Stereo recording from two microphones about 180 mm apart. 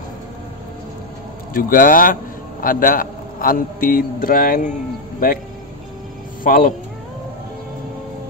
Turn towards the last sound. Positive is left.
turn(degrees=50)  # may be behind; listen again after turning